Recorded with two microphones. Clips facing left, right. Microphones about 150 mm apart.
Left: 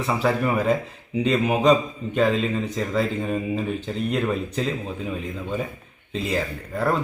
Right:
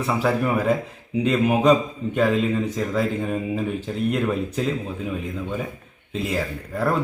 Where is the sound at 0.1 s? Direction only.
5° right (ahead or behind).